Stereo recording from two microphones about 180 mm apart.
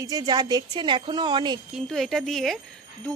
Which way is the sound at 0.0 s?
20° right (ahead or behind).